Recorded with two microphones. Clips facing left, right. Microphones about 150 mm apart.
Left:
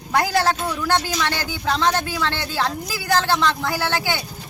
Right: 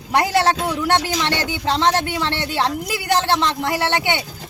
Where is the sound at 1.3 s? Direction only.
70° right (ahead or behind).